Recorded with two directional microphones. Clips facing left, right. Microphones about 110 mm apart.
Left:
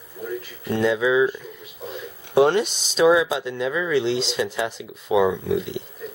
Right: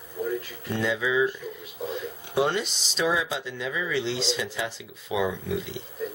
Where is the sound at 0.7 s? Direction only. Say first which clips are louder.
Left 6 dB; 60° left (ahead or behind).